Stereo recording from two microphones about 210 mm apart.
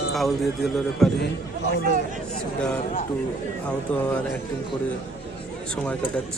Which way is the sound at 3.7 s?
5° left (ahead or behind).